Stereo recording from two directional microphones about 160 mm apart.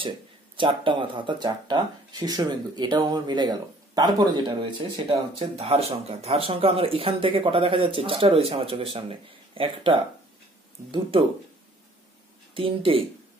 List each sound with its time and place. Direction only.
0.6 s speech: 30° right (ahead or behind)
12.5 s speech: 35° right (ahead or behind)